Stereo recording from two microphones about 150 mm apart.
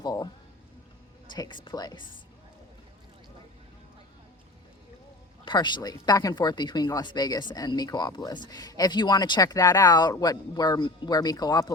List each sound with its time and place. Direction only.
0.0 s music: 25° left (ahead or behind)
1.4 s speech: 30° left (ahead or behind)
5.5 s speech: 30° left (ahead or behind)